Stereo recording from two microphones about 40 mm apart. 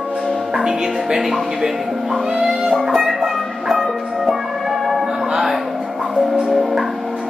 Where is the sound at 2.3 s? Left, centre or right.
Centre.